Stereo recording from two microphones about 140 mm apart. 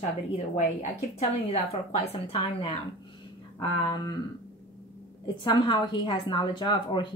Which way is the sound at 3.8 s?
30° left (ahead or behind).